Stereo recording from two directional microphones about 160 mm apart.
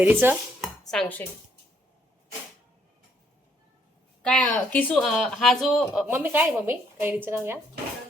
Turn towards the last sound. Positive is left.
turn(degrees=-15)  # may be behind; listen again after turning